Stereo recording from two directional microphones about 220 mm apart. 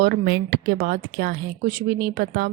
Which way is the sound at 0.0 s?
45° right (ahead or behind).